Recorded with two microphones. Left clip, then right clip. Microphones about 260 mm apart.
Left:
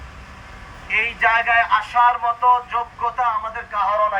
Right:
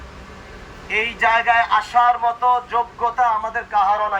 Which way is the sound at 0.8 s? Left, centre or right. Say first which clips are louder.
Even; centre.